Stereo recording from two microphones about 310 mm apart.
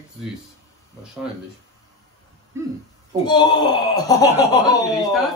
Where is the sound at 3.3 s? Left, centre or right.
Centre.